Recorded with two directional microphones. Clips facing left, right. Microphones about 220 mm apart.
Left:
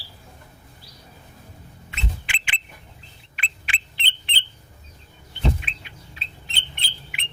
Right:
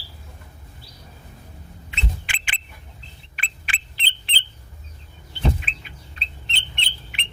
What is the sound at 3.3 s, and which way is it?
Bird, 40° right (ahead or behind).